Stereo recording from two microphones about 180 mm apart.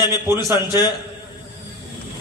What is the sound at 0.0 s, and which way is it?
Speech, 15° right (ahead or behind).